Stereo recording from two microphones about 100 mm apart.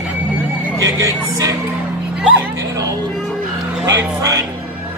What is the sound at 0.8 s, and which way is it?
Speech, 35° right (ahead or behind).